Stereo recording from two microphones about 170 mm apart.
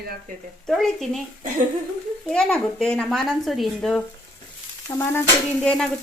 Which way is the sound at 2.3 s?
5° left (ahead or behind).